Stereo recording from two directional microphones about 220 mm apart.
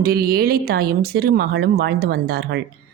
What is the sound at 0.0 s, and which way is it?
Speech, 45° right (ahead or behind).